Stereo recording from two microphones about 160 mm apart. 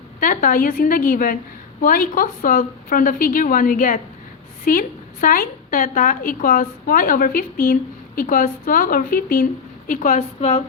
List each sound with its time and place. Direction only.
0.2 s a woman's voice: 55° left (ahead or behind)